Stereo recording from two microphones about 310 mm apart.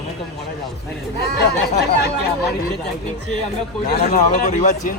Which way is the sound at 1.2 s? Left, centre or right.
Left.